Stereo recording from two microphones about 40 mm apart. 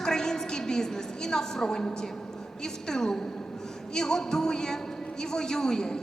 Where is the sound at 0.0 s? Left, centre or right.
Centre.